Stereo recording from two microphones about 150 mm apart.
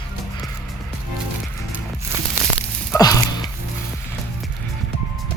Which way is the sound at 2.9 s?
25° left (ahead or behind).